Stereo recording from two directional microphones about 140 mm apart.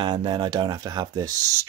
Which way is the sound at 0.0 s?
30° right (ahead or behind).